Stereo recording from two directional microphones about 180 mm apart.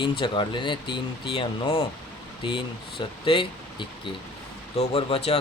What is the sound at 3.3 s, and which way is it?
Speech, 30° left (ahead or behind).